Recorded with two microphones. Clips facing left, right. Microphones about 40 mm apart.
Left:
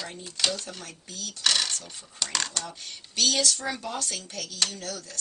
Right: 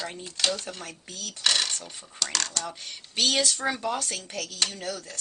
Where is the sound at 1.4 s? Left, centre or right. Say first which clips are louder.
Even; centre.